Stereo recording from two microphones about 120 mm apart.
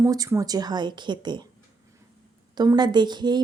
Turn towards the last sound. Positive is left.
turn(degrees=-35)  # may be behind; listen again after turning